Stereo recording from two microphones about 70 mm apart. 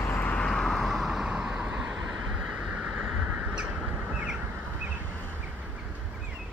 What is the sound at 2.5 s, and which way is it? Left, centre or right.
Vehicle, centre.